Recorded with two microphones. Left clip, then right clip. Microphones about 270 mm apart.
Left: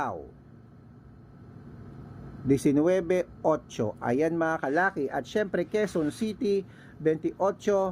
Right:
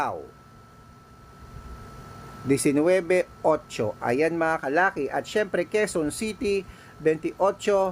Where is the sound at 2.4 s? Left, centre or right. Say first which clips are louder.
Right 2 dB; centre.